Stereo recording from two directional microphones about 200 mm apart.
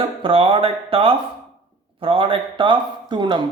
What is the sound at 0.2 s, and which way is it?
A man's voice, 25° right (ahead or behind).